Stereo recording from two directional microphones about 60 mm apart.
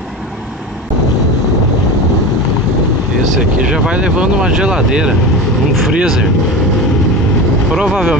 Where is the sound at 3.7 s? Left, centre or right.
Centre.